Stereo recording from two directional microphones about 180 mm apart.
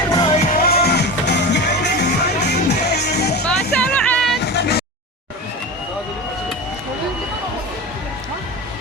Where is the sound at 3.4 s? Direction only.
5° left (ahead or behind).